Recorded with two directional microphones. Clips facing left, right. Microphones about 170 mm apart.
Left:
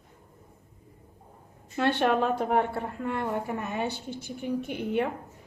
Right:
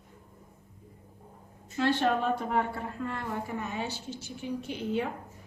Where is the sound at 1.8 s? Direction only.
65° left (ahead or behind).